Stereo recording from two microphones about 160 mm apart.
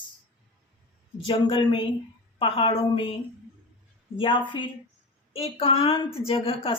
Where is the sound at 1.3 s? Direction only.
30° left (ahead or behind).